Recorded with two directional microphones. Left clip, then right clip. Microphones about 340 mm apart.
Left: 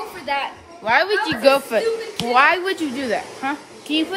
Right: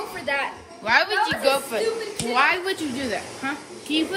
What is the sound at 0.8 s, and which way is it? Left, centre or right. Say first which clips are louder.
A woman's voice: left 2 dB; left.